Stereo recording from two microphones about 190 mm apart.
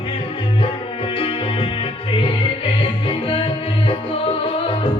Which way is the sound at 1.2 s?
30° left (ahead or behind).